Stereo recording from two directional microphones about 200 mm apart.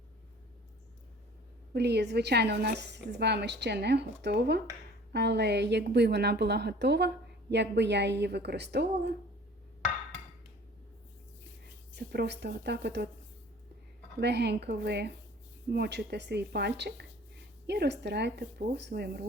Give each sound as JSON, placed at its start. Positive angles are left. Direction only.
{"t": 1.7, "sound": "a woman's voice", "side_deg": -55}
{"t": 11.9, "sound": "a woman's voice", "side_deg": -60}
{"t": 14.2, "sound": "a woman's voice", "side_deg": -55}